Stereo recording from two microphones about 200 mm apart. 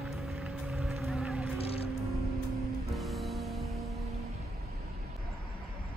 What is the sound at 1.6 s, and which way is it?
Vehicle, 30° left (ahead or behind).